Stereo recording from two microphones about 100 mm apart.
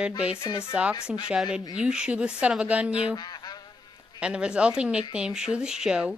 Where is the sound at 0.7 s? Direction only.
10° right (ahead or behind).